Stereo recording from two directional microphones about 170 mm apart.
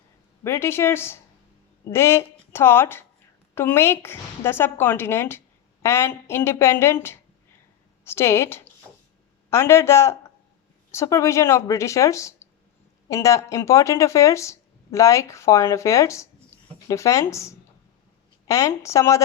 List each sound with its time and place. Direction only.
0.4 s speech: 15° left (ahead or behind)